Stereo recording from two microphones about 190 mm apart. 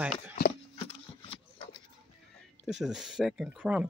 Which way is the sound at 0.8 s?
30° left (ahead or behind).